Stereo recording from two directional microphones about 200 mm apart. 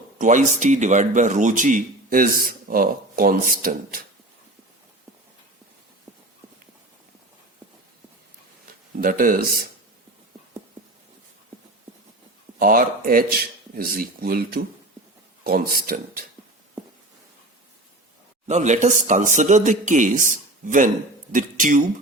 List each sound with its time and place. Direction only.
0.2 s speech: 40° right (ahead or behind)
9.0 s speech: 45° right (ahead or behind)
12.5 s speech: 45° right (ahead or behind)
18.4 s speech: 35° right (ahead or behind)